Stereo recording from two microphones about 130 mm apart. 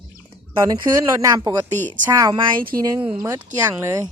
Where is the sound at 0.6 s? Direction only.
25° right (ahead or behind).